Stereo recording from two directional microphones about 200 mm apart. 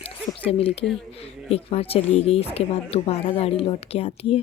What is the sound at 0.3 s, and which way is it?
Speech, 30° left (ahead or behind).